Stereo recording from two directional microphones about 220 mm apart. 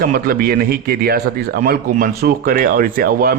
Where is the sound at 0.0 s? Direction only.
40° right (ahead or behind).